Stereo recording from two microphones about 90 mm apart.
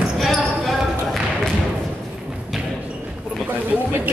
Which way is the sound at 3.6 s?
20° right (ahead or behind).